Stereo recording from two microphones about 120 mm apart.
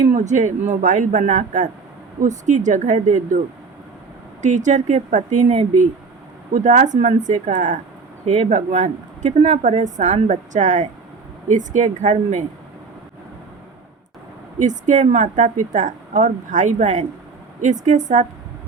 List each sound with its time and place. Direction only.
0.0 s a woman's voice: 85° right
4.4 s a woman's voice: 90° right
6.5 s a woman's voice: 90° right
14.6 s a woman's voice: 90° right